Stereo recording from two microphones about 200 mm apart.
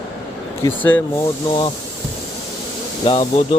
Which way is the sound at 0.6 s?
10° left (ahead or behind).